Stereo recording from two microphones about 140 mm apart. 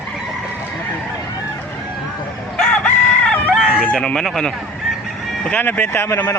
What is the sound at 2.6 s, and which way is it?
Chicken, 10° left (ahead or behind).